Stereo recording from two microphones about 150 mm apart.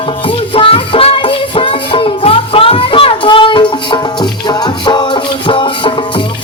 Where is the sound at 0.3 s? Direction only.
35° left (ahead or behind).